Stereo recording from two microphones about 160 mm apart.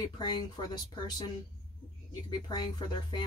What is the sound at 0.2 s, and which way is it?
Speech, 25° left (ahead or behind).